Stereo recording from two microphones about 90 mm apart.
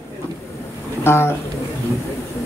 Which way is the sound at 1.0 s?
25° left (ahead or behind).